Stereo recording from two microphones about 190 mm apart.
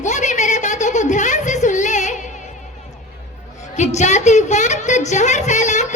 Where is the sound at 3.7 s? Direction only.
40° left (ahead or behind).